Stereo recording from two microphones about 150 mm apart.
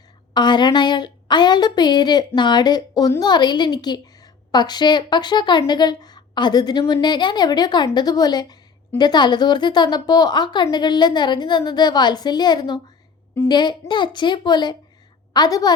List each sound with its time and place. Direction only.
0.3 s a woman's voice: 30° left (ahead or behind)